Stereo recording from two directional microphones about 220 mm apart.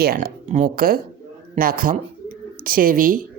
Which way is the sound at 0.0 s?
45° right (ahead or behind).